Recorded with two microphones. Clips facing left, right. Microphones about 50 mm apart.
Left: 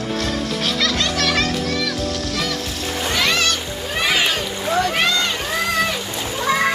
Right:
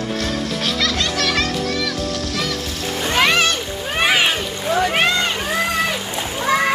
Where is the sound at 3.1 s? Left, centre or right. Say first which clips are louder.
Right 4 dB; right.